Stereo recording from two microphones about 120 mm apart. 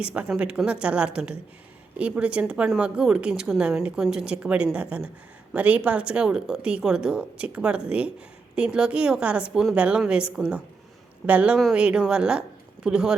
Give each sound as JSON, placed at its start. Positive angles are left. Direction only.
{"t": 0.0, "sound": "speech", "side_deg": -10}